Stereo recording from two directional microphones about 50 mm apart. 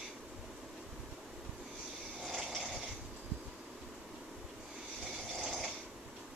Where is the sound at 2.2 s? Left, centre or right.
Centre.